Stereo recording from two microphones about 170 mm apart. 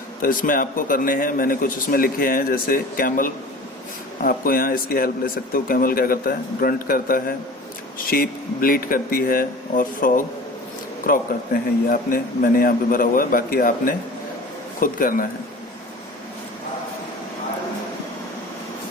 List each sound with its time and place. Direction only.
0.2 s speech: 55° left (ahead or behind)